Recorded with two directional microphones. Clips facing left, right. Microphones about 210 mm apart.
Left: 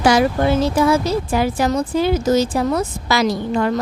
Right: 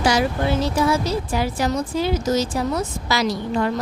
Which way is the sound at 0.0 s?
55° left (ahead or behind).